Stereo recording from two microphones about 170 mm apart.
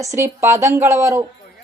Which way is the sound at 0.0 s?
15° right (ahead or behind).